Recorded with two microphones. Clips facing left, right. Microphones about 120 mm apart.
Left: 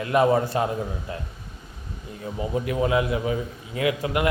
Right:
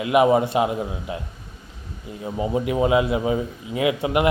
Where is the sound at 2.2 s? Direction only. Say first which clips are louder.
Right 4 dB; 20° right (ahead or behind).